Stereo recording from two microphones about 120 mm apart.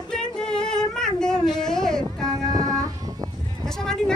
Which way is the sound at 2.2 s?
30° right (ahead or behind).